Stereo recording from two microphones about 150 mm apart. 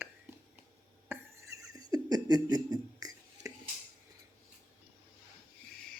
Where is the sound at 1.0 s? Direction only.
20° right (ahead or behind).